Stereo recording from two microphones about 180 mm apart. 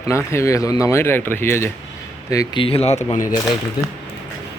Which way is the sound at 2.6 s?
35° left (ahead or behind).